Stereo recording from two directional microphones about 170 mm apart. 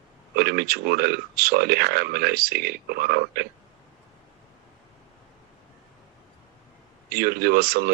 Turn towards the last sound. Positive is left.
turn(degrees=-65)  # may be behind; listen again after turning